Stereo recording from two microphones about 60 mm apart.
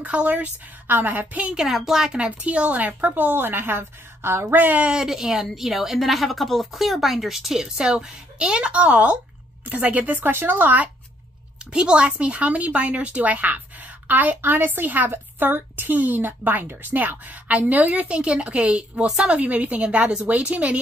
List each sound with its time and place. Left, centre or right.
0.0 s a woman's voice: right
1.5 s a woman's voice: centre; by 3.1 s right
3.1 s a woman's voice: right
4.6 s a woman's voice: right
4.9 s a woman's voice: centre; by 10.9 s right
11.7 s a woman's voice: centre